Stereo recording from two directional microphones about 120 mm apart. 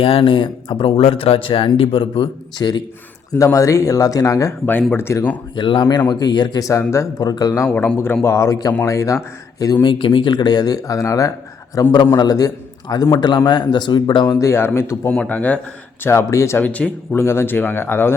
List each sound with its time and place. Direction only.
0.0 s speech: 50° left (ahead or behind); by 5.4 s 15° left (ahead or behind)
5.5 s a man's voice: 40° left (ahead or behind)
7.7 s speech: 10° left (ahead or behind); by 9.7 s 30° left (ahead or behind)
9.8 s a man's voice: 45° left (ahead or behind)
14.3 s speech: 20° left (ahead or behind)
16.0 s speech: 25° left (ahead or behind)